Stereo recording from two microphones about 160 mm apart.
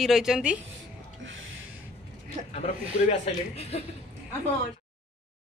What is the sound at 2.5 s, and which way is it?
A man's voice, 40° left (ahead or behind).